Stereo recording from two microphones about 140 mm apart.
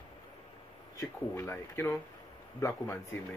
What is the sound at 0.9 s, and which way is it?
Speech, 15° left (ahead or behind).